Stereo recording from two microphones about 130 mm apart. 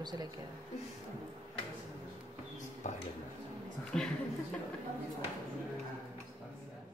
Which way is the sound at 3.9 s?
5° left (ahead or behind).